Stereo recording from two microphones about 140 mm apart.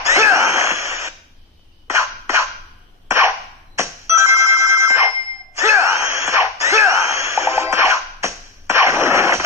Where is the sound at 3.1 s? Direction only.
20° right (ahead or behind).